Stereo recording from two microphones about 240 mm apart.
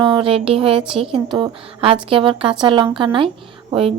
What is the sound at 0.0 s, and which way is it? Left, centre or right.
Speech, right.